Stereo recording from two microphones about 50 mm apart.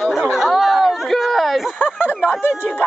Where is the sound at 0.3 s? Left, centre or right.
Centre.